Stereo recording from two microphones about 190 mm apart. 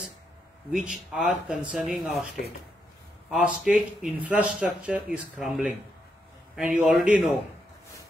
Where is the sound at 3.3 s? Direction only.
5° right (ahead or behind).